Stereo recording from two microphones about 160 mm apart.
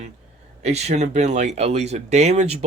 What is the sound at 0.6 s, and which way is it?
Speech, 45° right (ahead or behind).